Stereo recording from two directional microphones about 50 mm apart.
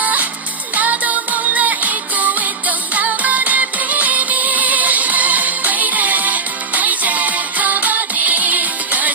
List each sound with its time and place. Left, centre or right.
0.0 s music: right